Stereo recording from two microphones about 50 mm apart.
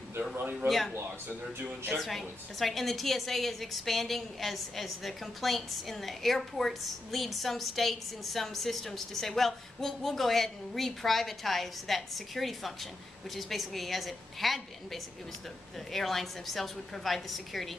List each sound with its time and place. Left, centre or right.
0.4 s a man's voice: right
0.7 s a woman's voice: centre
2.0 s a woman's voice: centre